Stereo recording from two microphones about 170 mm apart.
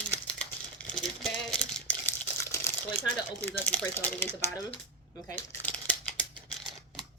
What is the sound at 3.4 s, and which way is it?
Speech, 10° left (ahead or behind).